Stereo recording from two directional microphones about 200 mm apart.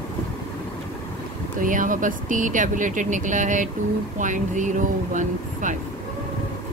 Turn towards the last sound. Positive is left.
turn(degrees=-40)  # may be behind; listen again after turning